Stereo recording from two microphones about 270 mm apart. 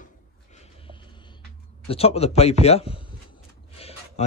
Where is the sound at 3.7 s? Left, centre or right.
Left.